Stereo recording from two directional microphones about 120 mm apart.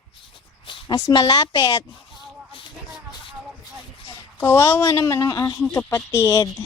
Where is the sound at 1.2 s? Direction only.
25° left (ahead or behind).